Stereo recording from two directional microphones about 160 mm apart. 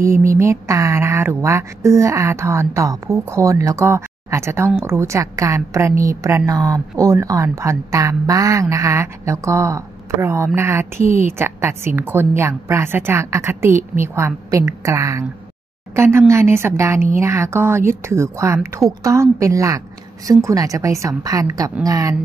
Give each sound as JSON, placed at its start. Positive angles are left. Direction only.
{"t": 0.0, "sound": "a woman's voice", "side_deg": -20}